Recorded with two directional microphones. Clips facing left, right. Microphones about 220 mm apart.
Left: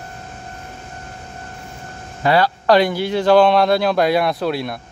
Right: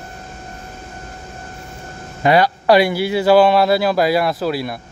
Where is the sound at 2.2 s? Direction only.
15° right (ahead or behind).